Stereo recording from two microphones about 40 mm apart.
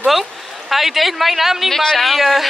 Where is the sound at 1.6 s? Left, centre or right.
Centre.